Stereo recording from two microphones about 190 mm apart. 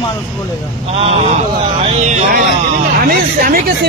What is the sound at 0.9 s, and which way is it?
A man's voice, 35° right (ahead or behind).